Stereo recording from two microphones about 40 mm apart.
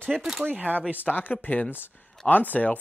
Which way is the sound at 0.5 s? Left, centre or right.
Right.